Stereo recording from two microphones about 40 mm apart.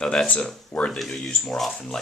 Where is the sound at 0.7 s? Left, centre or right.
Left.